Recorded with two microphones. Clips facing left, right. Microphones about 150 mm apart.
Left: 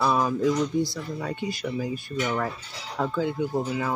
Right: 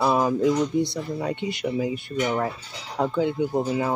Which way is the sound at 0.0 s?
20° right (ahead or behind).